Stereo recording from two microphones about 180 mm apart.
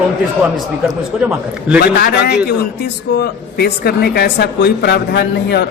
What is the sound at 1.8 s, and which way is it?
Speech, 60° left (ahead or behind).